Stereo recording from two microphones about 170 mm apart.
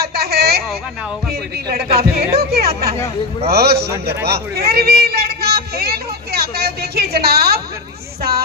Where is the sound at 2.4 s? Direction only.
65° right (ahead or behind).